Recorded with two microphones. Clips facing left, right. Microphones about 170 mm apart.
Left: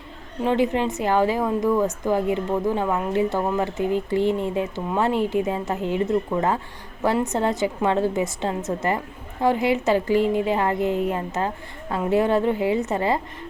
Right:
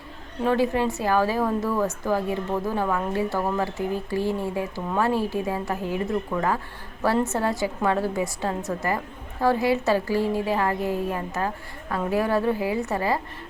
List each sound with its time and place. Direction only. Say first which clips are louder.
0.4 s a woman's voice: left 1 dB; 20° left (ahead or behind)